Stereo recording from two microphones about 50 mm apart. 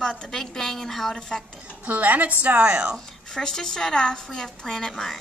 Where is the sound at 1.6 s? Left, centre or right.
Right.